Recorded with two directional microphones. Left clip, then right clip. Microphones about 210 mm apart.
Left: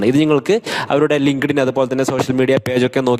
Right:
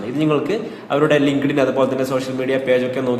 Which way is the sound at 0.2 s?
50° left (ahead or behind).